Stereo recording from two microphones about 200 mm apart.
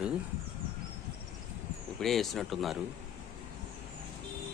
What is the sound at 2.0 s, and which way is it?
Speech, centre (ahead or behind).